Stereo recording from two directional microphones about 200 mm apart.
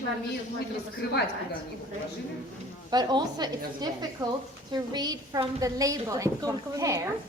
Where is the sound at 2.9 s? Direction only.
20° right (ahead or behind).